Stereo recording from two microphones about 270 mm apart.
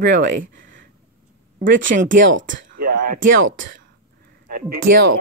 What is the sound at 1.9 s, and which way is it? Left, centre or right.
Speech, right.